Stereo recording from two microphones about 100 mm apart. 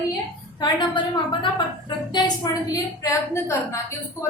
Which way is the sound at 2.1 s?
45° left (ahead or behind).